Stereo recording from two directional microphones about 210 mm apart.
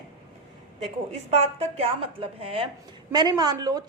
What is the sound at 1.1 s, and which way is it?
A woman's voice, 30° right (ahead or behind).